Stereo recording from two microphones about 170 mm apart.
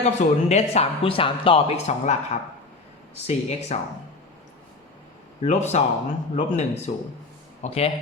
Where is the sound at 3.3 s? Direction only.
40° left (ahead or behind).